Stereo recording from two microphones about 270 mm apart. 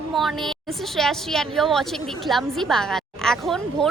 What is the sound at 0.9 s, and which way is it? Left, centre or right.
Speech, centre.